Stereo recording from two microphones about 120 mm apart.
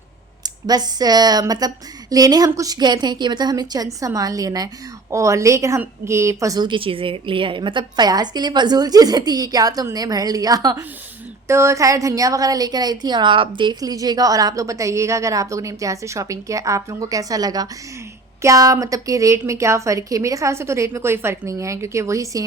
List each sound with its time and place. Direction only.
0.4 s a woman's voice: 35° right (ahead or behind)
6.7 s a woman's voice: 45° right (ahead or behind); by 22.4 s 25° right (ahead or behind)